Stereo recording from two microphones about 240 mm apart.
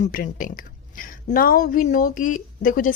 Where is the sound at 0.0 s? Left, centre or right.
Left.